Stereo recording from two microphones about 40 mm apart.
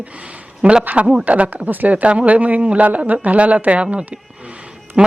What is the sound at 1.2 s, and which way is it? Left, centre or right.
Speech, right.